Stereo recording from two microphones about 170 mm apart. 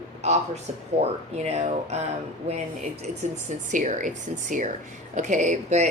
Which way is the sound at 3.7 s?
45° right (ahead or behind).